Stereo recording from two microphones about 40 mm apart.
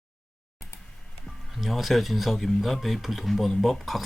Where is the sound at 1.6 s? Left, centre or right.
Centre.